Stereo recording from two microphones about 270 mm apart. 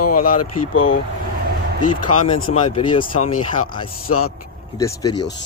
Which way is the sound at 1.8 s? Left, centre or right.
Left.